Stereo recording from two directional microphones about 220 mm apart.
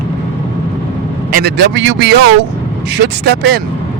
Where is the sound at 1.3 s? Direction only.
45° right (ahead or behind).